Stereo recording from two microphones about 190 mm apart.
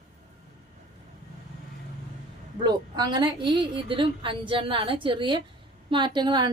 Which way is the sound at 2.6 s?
20° right (ahead or behind).